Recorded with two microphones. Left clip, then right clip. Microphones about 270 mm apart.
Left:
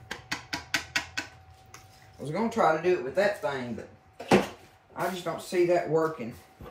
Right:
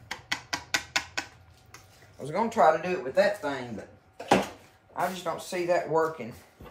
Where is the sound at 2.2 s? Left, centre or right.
Right.